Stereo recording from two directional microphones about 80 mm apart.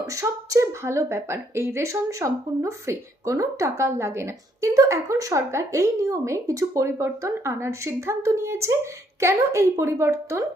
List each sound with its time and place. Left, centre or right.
0.1 s speech: right